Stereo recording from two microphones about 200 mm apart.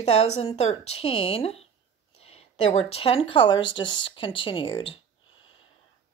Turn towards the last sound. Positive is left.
turn(degrees=25)  # may be behind; listen again after turning